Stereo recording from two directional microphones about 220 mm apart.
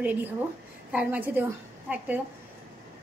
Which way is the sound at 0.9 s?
5° right (ahead or behind).